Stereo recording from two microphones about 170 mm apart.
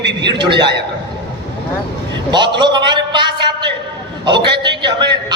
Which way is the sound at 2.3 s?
25° right (ahead or behind).